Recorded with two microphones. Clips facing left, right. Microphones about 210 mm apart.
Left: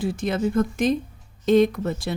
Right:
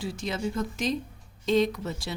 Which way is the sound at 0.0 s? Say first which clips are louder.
Left 7 dB; 55° left (ahead or behind).